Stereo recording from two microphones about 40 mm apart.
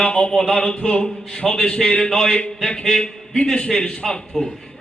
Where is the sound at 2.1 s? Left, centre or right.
Centre.